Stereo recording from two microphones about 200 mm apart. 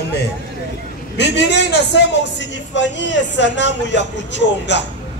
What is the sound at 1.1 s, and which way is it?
A man's voice, 60° left (ahead or behind).